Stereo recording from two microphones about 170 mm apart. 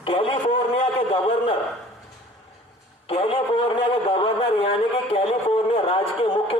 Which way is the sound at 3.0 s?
30° left (ahead or behind).